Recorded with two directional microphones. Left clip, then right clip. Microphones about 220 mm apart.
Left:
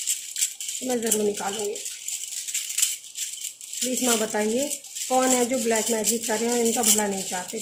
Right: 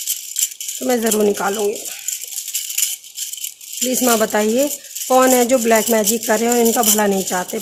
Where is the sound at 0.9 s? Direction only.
45° right (ahead or behind).